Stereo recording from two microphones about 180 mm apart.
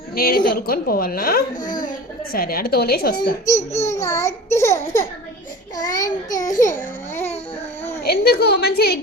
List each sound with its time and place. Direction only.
0.2 s a woman's voice: 55° left (ahead or behind)
3.8 s a child's voice: 15° left (ahead or behind)
8.0 s a woman's voice: 60° left (ahead or behind)